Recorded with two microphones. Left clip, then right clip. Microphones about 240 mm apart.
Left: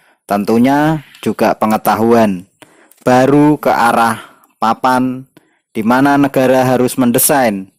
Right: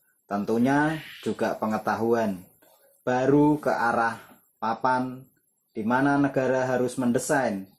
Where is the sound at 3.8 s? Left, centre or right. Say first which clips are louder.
Left 13 dB; left.